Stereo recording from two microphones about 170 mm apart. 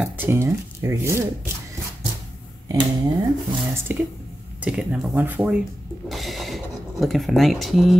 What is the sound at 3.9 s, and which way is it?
Speech, 10° right (ahead or behind).